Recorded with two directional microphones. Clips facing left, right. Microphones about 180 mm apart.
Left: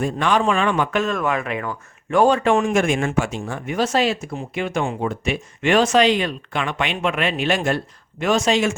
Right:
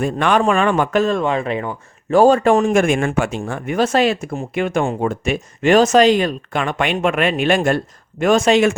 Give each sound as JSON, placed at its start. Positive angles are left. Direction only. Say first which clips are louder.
{"t": 0.0, "sound": "speech", "louder": "right 3 dB", "side_deg": -55}